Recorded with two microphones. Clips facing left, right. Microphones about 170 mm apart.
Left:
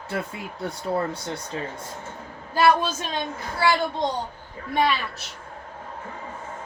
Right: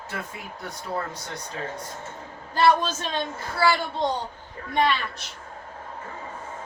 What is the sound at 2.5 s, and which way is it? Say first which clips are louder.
Speech: left 1 dB; 10° left (ahead or behind).